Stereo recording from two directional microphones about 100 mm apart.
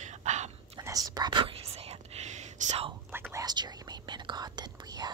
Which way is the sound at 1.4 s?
90° right.